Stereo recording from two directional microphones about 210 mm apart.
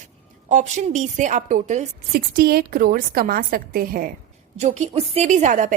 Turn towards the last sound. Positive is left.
turn(degrees=-35)  # may be behind; listen again after turning